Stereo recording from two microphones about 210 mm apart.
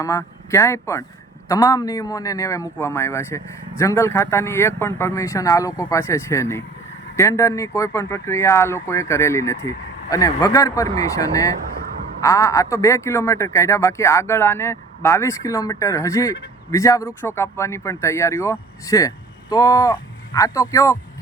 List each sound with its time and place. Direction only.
0.0 s a man's voice: 15° left (ahead or behind)